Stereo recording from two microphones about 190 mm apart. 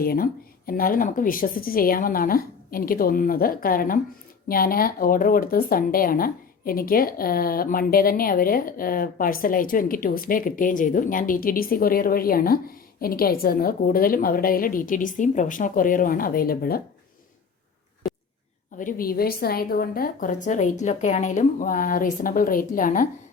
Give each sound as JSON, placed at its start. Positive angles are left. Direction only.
{"t": 0.0, "sound": "speech", "side_deg": 50}
{"t": 18.8, "sound": "speech", "side_deg": 45}